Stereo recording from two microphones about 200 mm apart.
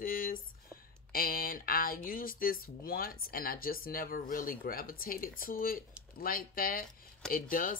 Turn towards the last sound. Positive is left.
turn(degrees=45)  # may be behind; listen again after turning